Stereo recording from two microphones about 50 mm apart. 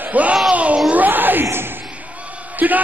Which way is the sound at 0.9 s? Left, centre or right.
Right.